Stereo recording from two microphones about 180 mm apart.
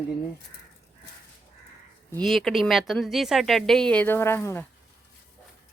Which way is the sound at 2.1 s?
Centre (ahead or behind).